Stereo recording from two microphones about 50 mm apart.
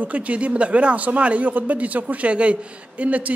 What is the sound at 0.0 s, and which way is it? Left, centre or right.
Speech, right.